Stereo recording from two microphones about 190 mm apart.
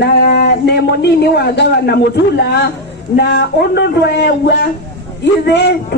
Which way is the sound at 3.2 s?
60° left (ahead or behind).